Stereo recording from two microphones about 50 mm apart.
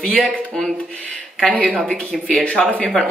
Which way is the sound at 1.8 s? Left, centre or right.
Centre.